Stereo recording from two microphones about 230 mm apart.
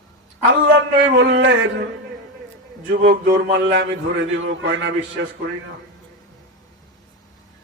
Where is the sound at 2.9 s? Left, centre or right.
Right.